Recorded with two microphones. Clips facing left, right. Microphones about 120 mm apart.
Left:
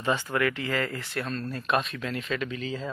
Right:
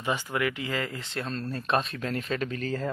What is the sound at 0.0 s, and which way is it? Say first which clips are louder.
Speech: left 2 dB; 15° right (ahead or behind).